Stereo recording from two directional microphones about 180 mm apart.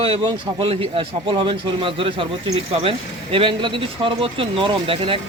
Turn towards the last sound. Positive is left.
turn(degrees=-30)  # may be behind; listen again after turning